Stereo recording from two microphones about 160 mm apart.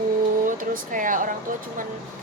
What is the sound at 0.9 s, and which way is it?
Speech, 55° right (ahead or behind).